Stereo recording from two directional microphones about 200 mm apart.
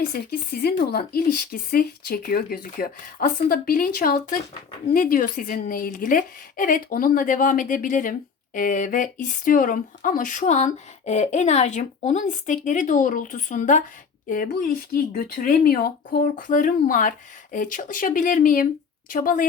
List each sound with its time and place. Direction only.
0.0 s speech: 50° left (ahead or behind)